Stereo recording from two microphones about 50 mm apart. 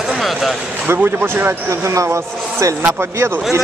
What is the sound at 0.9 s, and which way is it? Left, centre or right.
Speech, right.